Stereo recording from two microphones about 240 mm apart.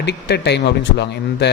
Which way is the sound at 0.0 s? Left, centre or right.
Left.